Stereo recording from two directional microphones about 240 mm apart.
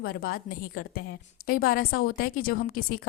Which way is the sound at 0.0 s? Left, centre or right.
Left.